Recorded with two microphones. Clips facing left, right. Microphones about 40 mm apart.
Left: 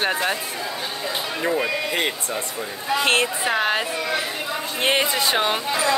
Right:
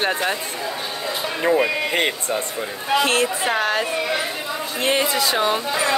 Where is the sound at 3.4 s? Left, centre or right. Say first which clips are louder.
Right 1 dB; centre.